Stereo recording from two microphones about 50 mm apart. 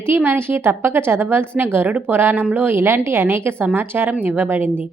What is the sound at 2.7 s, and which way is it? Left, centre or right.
A woman's voice, right.